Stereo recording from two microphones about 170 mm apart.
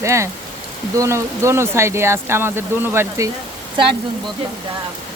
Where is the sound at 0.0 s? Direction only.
15° right (ahead or behind).